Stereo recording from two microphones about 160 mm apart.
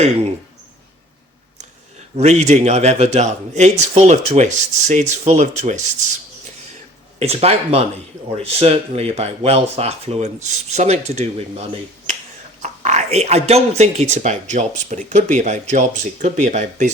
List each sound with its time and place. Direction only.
2.1 s speech: 45° right (ahead or behind)
7.2 s speech: 40° right (ahead or behind)